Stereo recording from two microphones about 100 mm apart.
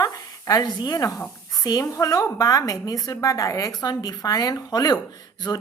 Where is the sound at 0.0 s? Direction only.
40° left (ahead or behind).